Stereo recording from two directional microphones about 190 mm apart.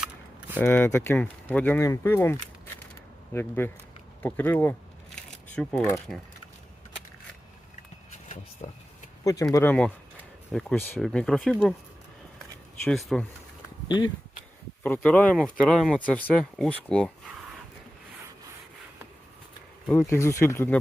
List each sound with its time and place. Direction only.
0.0 s a sound: 10° right (ahead or behind)
0.6 s speech: 10° left (ahead or behind)
8.3 s vehicle: 40° left (ahead or behind)
9.2 s speech: 15° left (ahead or behind)
12.8 s speech: centre (ahead or behind)
13.8 s speech: 25° left (ahead or behind)
14.8 s speech: 10° left (ahead or behind)
19.9 s speech: 15° left (ahead or behind)